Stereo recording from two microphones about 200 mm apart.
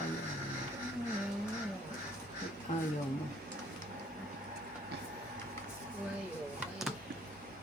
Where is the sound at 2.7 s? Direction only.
40° left (ahead or behind).